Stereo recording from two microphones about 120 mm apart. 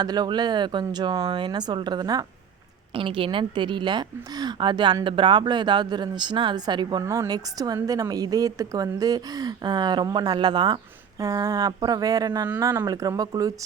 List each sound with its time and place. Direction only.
0.0 s a woman's voice: 35° right (ahead or behind)
2.9 s a woman's voice: 50° right (ahead or behind)
7.0 s a woman's voice: 25° right (ahead or behind)
11.2 s a woman's voice: 30° right (ahead or behind)